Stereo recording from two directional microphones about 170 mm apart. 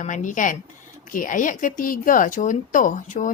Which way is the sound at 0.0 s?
50° left (ahead or behind).